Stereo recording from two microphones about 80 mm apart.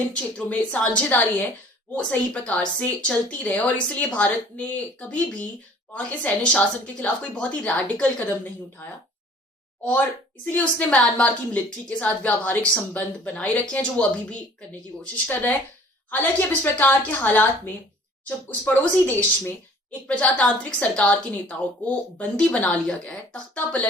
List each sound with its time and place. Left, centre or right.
0.1 s a woman's voice: centre
10.4 s a woman's voice: centre